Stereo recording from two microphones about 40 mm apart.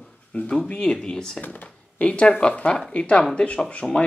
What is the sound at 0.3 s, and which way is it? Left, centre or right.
Speech, left.